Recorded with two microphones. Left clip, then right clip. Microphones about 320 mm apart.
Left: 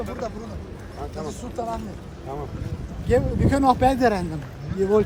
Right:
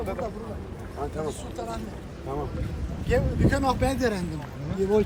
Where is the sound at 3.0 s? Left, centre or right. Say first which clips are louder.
Left 4 dB; left.